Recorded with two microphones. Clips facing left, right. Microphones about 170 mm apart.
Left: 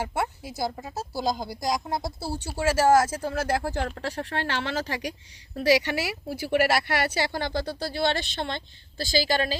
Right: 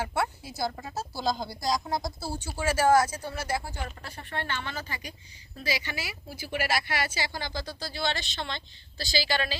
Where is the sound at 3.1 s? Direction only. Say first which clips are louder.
Left 6 dB; 90° left.